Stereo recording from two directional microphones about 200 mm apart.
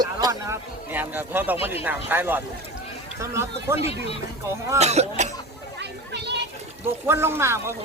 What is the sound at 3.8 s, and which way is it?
Speech, 30° left (ahead or behind).